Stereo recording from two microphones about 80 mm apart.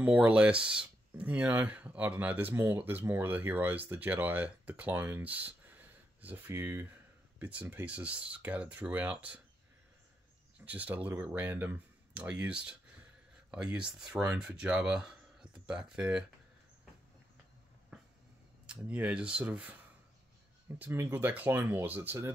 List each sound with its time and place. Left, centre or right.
0.0 s speech: centre; by 6.9 s right
7.3 s speech: right
10.6 s speech: centre
18.7 s speech: centre
20.8 s speech: right